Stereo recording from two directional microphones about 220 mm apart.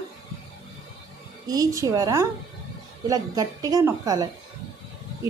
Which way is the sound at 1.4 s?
15° right (ahead or behind).